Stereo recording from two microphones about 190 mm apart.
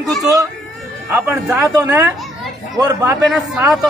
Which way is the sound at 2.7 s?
20° right (ahead or behind).